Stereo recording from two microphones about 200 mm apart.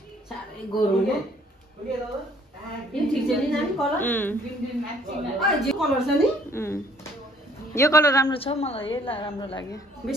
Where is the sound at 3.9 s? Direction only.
10° left (ahead or behind).